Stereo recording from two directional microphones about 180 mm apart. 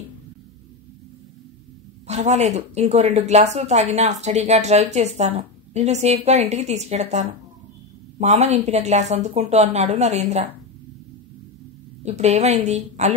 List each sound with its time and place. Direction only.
2.0 s a woman's voice: 40° right (ahead or behind)
12.0 s a woman's voice: 40° right (ahead or behind)